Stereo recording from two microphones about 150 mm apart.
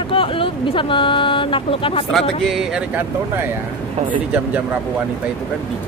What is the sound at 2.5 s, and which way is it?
Speech, 5° right (ahead or behind).